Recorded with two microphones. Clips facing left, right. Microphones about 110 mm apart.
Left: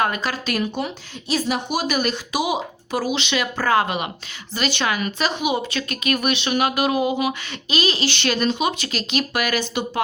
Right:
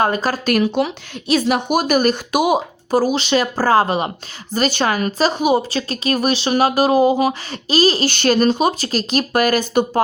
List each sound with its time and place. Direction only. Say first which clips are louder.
0.0 s a woman's voice: right 5 dB; 35° right (ahead or behind)
0.5 s a woman's voice: right 10 dB; 85° right; by 10.0 s 45° right (ahead or behind)